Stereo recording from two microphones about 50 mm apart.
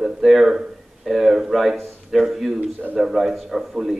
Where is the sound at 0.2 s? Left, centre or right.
Centre.